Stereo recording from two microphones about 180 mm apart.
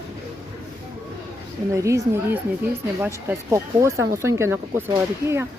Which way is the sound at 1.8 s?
15° right (ahead or behind).